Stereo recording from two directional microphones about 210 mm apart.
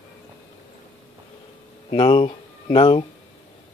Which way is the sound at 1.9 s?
25° left (ahead or behind).